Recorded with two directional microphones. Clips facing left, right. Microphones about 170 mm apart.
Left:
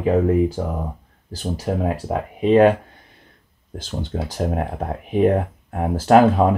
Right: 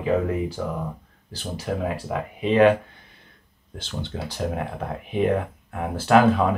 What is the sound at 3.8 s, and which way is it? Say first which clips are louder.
Speech: left 4 dB; 45° left (ahead or behind).